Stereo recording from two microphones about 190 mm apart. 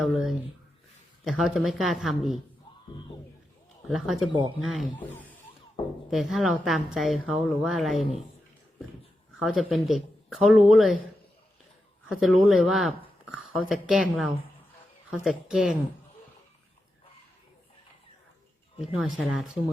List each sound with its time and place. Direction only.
0.0 s a woman's voice: centre (ahead or behind)
3.8 s a woman's voice: centre (ahead or behind)
4.3 s speech: 25° right (ahead or behind)
4.6 s a woman's voice: centre (ahead or behind)
9.4 s a woman's voice: centre (ahead or behind)
12.0 s a woman's voice: 5° right (ahead or behind)
18.8 s a woman's voice: centre (ahead or behind)